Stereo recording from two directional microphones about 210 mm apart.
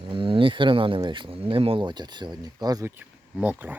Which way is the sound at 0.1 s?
25° right (ahead or behind).